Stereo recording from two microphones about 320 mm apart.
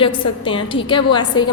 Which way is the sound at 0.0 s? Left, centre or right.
Centre.